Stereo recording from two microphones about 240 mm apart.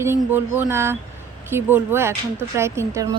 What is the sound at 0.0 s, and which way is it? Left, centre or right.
Speech, centre.